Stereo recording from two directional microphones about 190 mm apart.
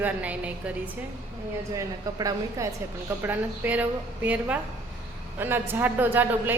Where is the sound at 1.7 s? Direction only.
15° right (ahead or behind).